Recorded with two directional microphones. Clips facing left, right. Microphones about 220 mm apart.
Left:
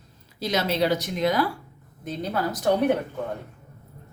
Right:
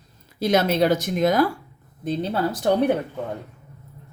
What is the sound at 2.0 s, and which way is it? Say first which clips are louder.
Speech: right 4 dB; 30° right (ahead or behind).